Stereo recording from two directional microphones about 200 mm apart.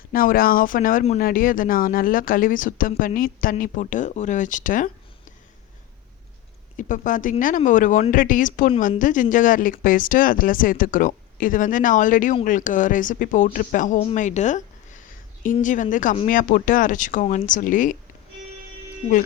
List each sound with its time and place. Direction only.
0.1 s speech: 45° left (ahead or behind)
6.7 s speech: 40° left (ahead or behind)